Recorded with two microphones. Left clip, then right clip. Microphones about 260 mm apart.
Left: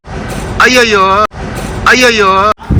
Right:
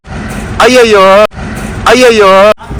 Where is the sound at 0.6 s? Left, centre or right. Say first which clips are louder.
Right 3 dB; centre.